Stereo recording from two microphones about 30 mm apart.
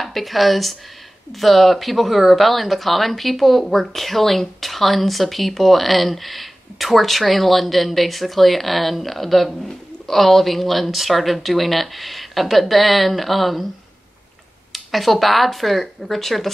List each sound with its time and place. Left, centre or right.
0.0 s speech: centre
14.7 s speech: centre